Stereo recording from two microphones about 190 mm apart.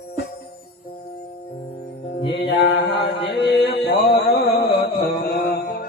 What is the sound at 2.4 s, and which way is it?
Mantra, 65° left (ahead or behind).